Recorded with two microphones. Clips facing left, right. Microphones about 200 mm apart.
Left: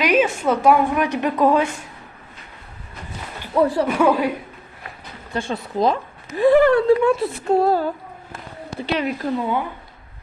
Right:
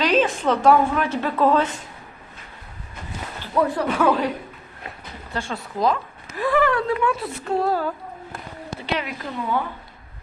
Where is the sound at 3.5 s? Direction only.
30° left (ahead or behind).